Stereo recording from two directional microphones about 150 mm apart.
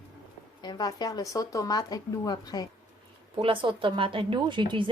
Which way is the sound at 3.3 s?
35° right (ahead or behind).